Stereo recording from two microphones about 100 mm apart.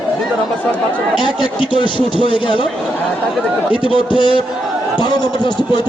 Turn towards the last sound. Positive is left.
turn(degrees=50)  # may be behind; listen again after turning